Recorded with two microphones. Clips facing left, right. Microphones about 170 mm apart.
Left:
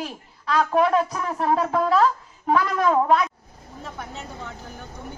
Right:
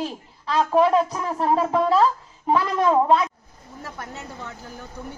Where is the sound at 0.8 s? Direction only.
30° right (ahead or behind).